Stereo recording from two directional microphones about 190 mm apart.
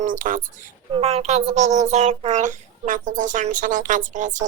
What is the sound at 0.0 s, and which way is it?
Speech, 45° right (ahead or behind).